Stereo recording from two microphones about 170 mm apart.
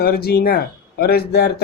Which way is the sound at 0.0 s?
65° left (ahead or behind).